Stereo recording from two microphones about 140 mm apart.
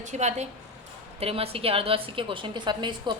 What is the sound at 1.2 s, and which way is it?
A woman's voice, 45° right (ahead or behind).